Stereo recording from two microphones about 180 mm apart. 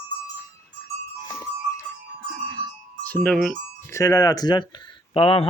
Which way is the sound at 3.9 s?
15° left (ahead or behind).